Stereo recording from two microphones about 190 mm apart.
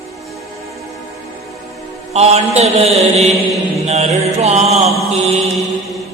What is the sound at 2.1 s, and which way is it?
A man's voice, 35° right (ahead or behind).